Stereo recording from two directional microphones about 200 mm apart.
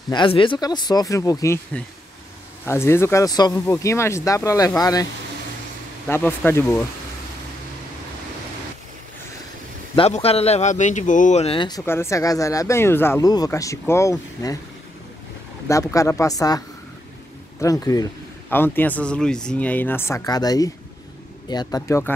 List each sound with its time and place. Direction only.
0.1 s speech: 25° left (ahead or behind)
6.0 s speech: 10° left (ahead or behind)
9.9 s a man's voice: 30° left (ahead or behind)
11.8 s speech: 10° left (ahead or behind)
15.7 s speech: 15° left (ahead or behind)